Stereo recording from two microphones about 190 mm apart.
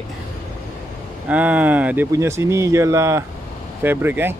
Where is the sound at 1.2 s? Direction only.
5° right (ahead or behind).